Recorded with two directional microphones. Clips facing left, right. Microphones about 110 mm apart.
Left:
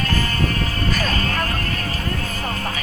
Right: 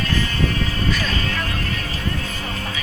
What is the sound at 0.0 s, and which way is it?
Music, 45° left (ahead or behind).